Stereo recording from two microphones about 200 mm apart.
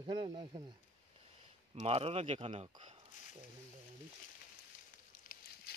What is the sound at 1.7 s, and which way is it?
Speech, 30° right (ahead or behind).